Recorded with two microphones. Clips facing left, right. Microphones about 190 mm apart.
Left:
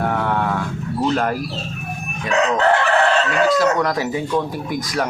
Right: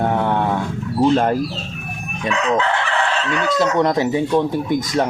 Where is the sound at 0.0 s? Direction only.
25° right (ahead or behind).